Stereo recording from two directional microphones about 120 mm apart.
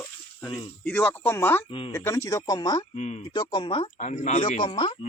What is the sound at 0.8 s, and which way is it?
A man's voice, 15° left (ahead or behind).